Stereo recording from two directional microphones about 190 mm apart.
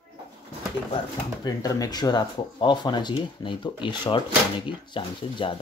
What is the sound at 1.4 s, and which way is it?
Speech, 20° left (ahead or behind).